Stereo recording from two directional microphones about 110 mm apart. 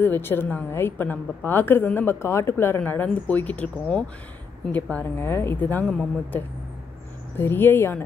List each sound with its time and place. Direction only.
0.0 s a woman's voice: 20° left (ahead or behind)